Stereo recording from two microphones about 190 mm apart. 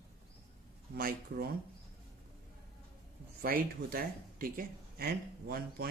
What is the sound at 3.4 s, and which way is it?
Speech, 50° right (ahead or behind).